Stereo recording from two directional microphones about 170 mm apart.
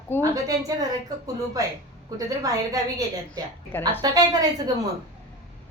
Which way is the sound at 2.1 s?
20° right (ahead or behind).